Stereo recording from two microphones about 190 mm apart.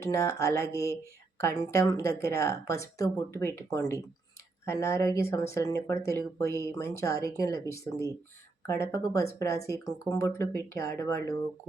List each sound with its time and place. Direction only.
0.0 s speech: 15° left (ahead or behind)